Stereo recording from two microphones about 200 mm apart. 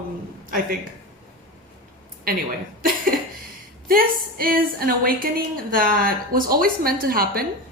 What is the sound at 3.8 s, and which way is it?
A woman's voice, 45° right (ahead or behind).